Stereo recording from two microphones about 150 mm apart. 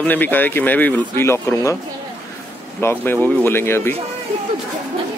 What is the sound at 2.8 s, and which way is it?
Speech, 15° left (ahead or behind).